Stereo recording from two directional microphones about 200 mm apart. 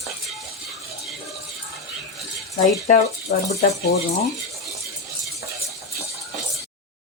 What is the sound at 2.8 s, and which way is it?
Speech, 35° left (ahead or behind).